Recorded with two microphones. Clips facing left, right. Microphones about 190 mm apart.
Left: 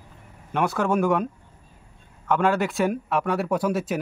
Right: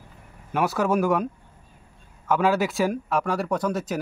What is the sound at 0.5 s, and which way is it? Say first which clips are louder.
Speech: even; 5° right (ahead or behind).